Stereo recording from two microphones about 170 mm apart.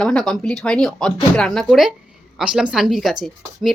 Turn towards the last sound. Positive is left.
turn(degrees=0)  # may be behind; listen again after turning